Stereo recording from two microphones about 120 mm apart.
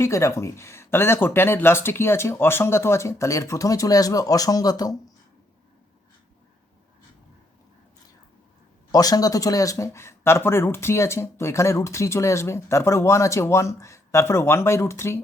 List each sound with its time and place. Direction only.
0.0 s speech: 25° left (ahead or behind)
8.9 s speech: 30° left (ahead or behind)